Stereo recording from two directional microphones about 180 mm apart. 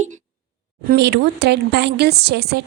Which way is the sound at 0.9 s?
65° right (ahead or behind).